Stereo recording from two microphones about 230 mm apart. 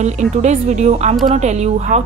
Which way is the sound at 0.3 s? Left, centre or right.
Right.